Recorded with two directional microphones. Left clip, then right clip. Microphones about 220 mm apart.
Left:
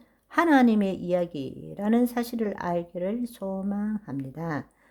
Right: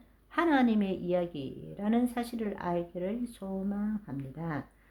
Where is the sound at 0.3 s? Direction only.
45° left (ahead or behind).